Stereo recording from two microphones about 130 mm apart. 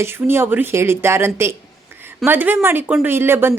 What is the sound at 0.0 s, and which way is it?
A woman's voice, 20° right (ahead or behind).